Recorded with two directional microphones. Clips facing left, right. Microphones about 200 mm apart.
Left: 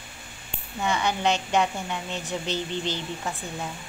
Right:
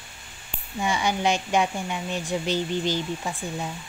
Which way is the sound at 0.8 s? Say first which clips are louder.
Right 1 dB; 10° right (ahead or behind).